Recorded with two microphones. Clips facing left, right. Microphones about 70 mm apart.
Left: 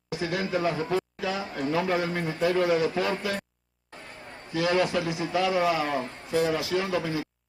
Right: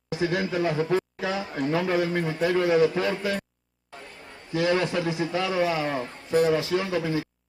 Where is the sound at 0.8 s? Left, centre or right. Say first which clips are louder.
Right 3 dB; right.